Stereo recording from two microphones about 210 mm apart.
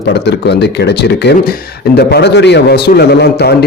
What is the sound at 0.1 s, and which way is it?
A man's voice, 55° left (ahead or behind).